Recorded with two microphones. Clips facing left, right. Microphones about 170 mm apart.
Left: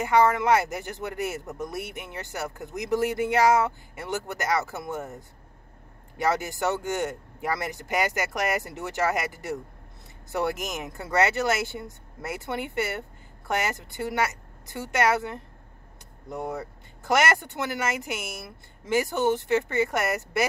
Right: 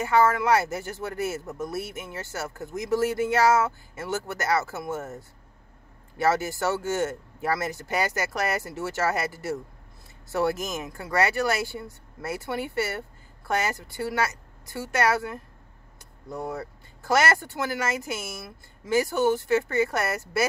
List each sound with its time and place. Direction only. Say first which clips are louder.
0.0 s speech: even; 20° left (ahead or behind)